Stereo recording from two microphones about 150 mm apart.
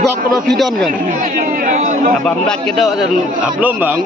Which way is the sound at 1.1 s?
65° right (ahead or behind).